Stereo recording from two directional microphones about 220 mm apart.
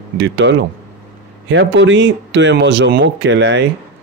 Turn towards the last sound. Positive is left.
turn(degrees=-55)  # may be behind; listen again after turning